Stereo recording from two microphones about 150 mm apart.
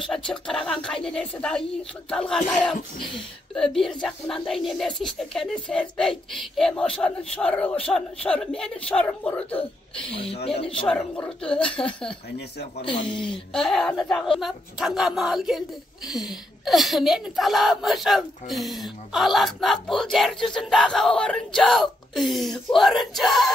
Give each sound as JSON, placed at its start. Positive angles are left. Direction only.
{"t": 0.0, "sound": "speech", "side_deg": 5}
{"t": 10.1, "sound": "speech", "side_deg": 40}
{"t": 11.0, "sound": "speech", "side_deg": 10}
{"t": 12.4, "sound": "speech", "side_deg": 90}
{"t": 12.9, "sound": "speech", "side_deg": 35}
{"t": 13.2, "sound": "speech", "side_deg": 5}